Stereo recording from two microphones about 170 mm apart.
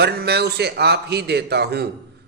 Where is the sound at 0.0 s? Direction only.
70° right (ahead or behind).